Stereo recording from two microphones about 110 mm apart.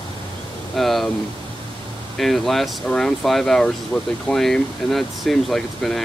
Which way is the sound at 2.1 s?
Centre (ahead or behind).